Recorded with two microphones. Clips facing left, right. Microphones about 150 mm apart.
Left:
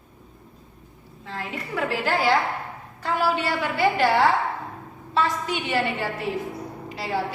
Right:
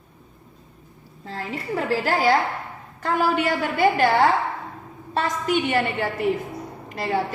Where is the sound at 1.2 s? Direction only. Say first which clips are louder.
Right 3 dB; 35° right (ahead or behind).